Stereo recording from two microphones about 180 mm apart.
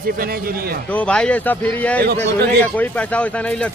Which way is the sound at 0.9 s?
5° left (ahead or behind).